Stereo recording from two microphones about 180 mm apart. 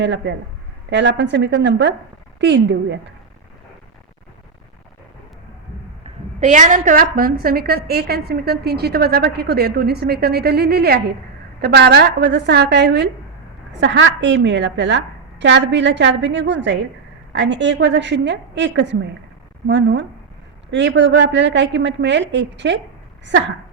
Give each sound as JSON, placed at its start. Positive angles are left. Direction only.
{"t": 0.0, "sound": "a woman's voice", "side_deg": -80}
{"t": 6.4, "sound": "a woman's voice", "side_deg": -40}
{"t": 13.8, "sound": "a woman's voice", "side_deg": -85}